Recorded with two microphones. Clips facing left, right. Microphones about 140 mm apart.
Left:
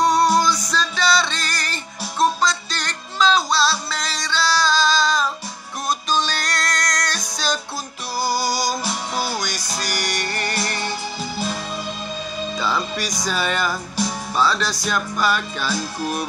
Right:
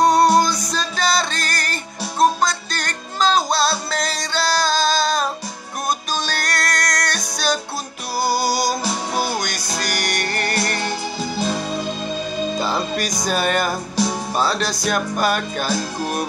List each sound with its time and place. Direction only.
0.0 s music: 50° right (ahead or behind)
11.4 s music: 30° right (ahead or behind)
13.2 s music: 50° right (ahead or behind)